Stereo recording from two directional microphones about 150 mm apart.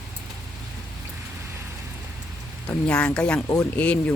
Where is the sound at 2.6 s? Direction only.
5° left (ahead or behind).